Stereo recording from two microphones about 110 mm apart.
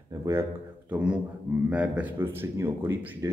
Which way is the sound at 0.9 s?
10° right (ahead or behind).